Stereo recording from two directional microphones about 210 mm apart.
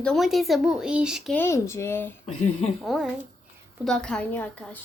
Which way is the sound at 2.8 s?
Centre (ahead or behind).